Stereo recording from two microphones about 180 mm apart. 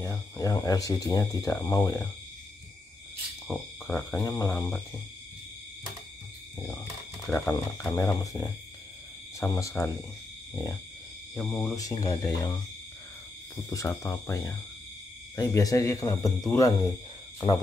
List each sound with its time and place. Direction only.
0.0 s speech: 15° left (ahead or behind)
3.4 s speech: 15° left (ahead or behind)
6.6 s speech: 15° left (ahead or behind)
7.2 s speech: 5° left (ahead or behind)
7.5 s speech: 20° left (ahead or behind)
11.3 s speech: 15° left (ahead or behind)
13.7 s speech: 15° left (ahead or behind)